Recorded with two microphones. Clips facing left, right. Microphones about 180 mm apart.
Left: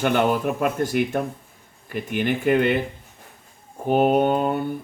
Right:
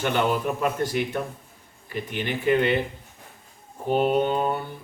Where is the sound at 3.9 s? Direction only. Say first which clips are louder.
Left 4 dB; 50° left (ahead or behind).